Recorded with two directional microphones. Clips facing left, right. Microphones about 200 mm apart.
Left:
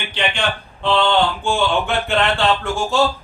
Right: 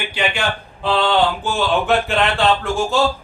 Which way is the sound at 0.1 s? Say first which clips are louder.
Left 1 dB; 5° right (ahead or behind).